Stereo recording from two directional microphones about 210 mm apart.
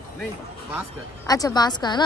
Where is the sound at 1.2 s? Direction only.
20° left (ahead or behind).